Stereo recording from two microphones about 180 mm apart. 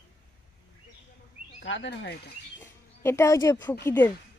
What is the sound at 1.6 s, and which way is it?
Speech, 90° left.